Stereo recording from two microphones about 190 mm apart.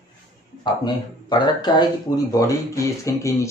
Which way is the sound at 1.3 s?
20° left (ahead or behind).